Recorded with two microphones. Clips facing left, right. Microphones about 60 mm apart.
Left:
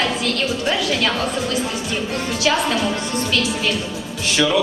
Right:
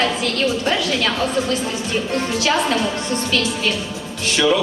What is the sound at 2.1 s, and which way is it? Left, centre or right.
Speech, centre.